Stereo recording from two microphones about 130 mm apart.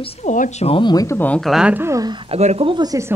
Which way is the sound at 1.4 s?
5° right (ahead or behind).